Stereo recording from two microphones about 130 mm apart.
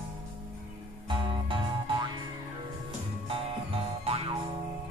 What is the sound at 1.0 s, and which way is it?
Music, 40° right (ahead or behind).